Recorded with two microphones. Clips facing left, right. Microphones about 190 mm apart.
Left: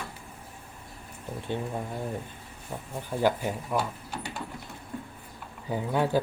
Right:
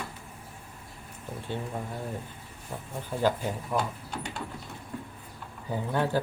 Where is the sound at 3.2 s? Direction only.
15° left (ahead or behind).